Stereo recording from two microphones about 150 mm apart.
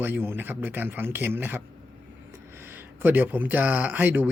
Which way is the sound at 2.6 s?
15° right (ahead or behind).